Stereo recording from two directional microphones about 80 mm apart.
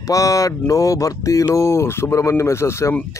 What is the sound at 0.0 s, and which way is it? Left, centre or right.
Speech, left.